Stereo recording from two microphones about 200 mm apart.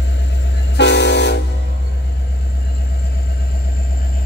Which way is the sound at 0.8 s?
60° left (ahead or behind).